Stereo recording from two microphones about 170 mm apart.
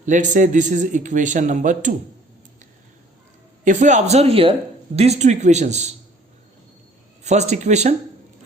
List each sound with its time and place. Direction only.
0.0 s a man's voice: 45° right (ahead or behind)
3.6 s a man's voice: 45° right (ahead or behind)
7.3 s a man's voice: 40° right (ahead or behind)